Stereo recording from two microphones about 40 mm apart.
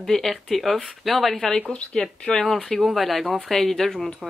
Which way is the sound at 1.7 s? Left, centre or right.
Left.